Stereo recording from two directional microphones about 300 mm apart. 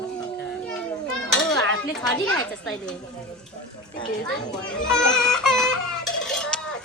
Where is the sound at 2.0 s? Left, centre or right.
Centre.